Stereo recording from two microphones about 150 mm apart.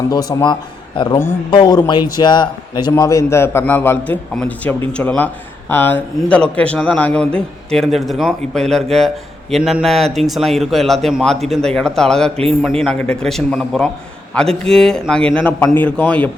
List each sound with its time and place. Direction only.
0.1 s a man's voice: 25° left (ahead or behind); by 16.3 s 10° left (ahead or behind)